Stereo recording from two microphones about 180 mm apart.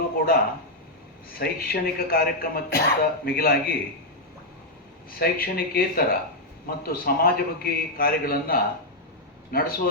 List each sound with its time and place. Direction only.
1.4 s speech: 60° left (ahead or behind)
5.2 s speech: 55° left (ahead or behind)